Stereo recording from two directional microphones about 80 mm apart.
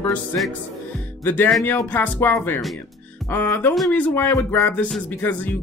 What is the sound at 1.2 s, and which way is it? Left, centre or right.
Speech, left.